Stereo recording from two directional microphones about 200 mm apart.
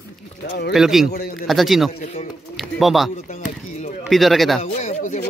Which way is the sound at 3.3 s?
35° left (ahead or behind).